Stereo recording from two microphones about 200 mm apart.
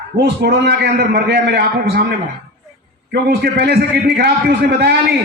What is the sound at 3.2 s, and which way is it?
A man's voice, 55° right (ahead or behind).